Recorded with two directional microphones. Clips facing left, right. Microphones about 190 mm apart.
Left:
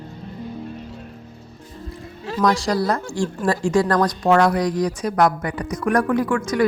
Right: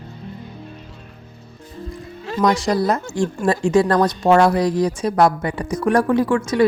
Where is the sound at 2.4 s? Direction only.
20° right (ahead or behind).